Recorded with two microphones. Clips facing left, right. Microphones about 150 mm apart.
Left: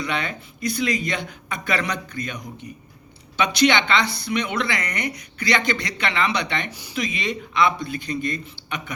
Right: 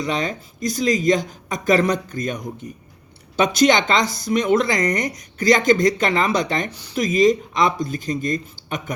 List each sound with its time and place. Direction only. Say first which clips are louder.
0.0 s a woman's voice: right 4 dB; 40° right (ahead or behind)
6.7 s speech: right 1 dB; 10° left (ahead or behind)
6.9 s speech: right 11 dB; 40° right (ahead or behind)